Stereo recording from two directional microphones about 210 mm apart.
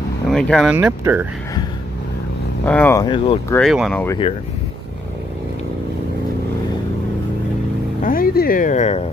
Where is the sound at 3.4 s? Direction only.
10° left (ahead or behind).